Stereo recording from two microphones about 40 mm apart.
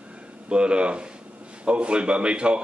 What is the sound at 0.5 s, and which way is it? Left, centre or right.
A man's voice, right.